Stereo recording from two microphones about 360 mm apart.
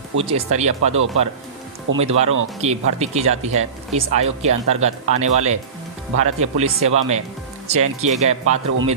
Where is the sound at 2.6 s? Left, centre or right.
Centre.